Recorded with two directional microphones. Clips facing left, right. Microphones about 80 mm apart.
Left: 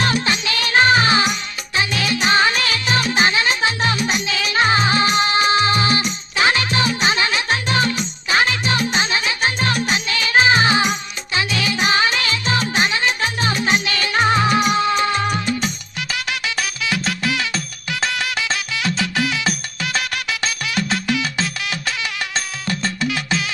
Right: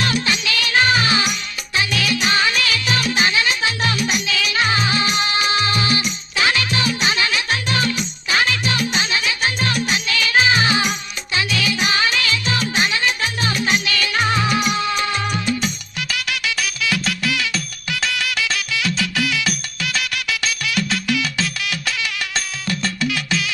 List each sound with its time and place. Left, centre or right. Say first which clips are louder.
0.0 s music: left 1 dB; left